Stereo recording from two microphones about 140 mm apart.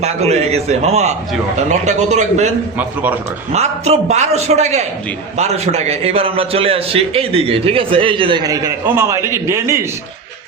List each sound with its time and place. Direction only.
0.0 s a man's voice: 50° right (ahead or behind)
2.7 s a man's voice: 10° right (ahead or behind)
3.5 s a man's voice: 50° right (ahead or behind); by 9.8 s 20° right (ahead or behind)